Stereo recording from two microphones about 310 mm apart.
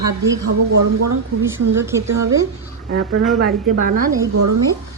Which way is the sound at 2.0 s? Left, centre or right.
Right.